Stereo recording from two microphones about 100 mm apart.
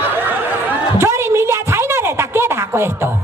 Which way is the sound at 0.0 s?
20° right (ahead or behind).